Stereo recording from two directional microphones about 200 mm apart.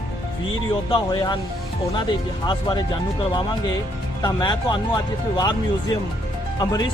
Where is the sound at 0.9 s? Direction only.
20° left (ahead or behind).